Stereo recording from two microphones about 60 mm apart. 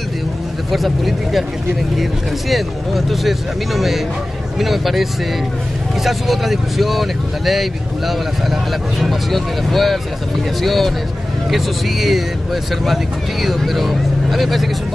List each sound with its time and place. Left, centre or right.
0.7 s speech: centre
2.5 s speech: centre
6.0 s speech: centre
9.0 s speech: centre